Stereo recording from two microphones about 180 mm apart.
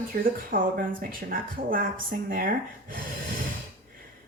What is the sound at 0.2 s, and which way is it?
Speech, 50° right (ahead or behind).